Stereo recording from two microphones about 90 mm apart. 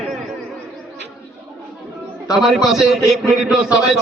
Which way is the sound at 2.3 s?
Centre (ahead or behind).